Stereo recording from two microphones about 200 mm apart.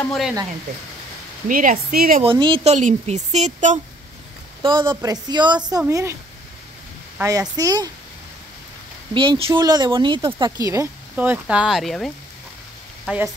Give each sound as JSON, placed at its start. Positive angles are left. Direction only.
{"t": 0.1, "sound": "speech", "side_deg": 0}
{"t": 1.5, "sound": "speech", "side_deg": -40}
{"t": 2.2, "sound": "a woman's voice", "side_deg": -25}
{"t": 4.6, "sound": "speech", "side_deg": -25}
{"t": 7.2, "sound": "speech", "side_deg": -20}
{"t": 9.1, "sound": "speech", "side_deg": -25}